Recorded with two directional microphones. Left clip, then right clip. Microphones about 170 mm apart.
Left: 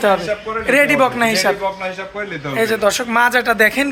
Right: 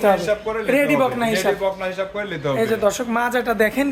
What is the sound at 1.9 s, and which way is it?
Speech, 85° right.